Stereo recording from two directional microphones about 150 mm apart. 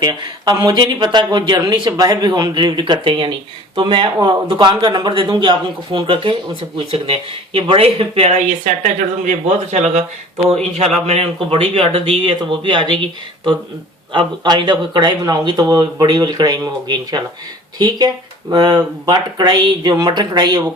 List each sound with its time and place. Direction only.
0.0 s a man's voice: 30° right (ahead or behind)